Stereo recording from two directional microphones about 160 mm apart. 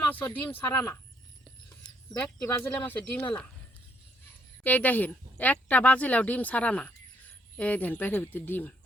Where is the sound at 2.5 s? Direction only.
15° left (ahead or behind).